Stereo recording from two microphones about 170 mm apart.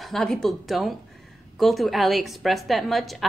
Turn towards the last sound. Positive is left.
turn(degrees=0)  # may be behind; listen again after turning